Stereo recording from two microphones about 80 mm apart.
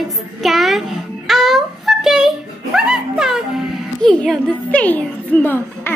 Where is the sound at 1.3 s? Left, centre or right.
Centre.